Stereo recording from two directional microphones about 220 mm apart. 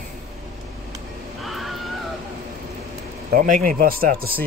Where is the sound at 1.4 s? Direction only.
Centre (ahead or behind).